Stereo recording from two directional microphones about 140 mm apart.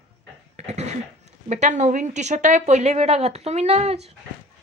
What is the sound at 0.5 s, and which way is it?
Speech, 50° right (ahead or behind).